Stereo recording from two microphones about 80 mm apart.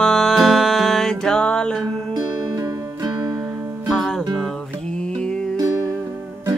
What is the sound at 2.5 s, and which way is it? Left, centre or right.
Music, right.